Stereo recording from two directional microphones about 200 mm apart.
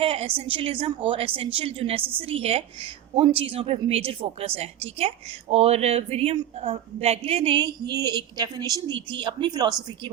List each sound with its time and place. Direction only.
0.0 s a woman's voice: 30° right (ahead or behind)